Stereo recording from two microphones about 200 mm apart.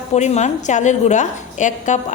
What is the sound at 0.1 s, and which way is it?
A woman's voice, 35° left (ahead or behind).